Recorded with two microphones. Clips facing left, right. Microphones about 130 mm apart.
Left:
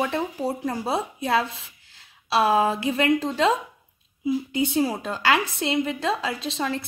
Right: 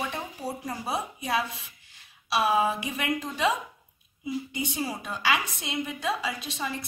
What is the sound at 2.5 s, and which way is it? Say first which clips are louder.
Speech: left 3 dB; 90° left.